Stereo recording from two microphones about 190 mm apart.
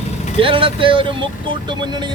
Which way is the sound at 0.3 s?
30° right (ahead or behind).